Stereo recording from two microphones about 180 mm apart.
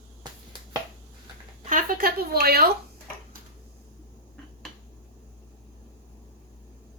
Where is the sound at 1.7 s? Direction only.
50° right (ahead or behind).